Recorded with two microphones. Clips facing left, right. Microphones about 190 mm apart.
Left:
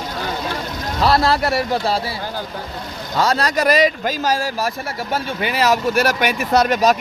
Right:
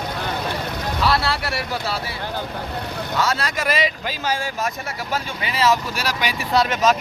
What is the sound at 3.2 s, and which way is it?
Speech, 40° left (ahead or behind).